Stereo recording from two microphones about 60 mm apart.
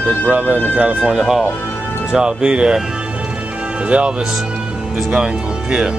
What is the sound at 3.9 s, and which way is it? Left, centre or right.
Speech, right.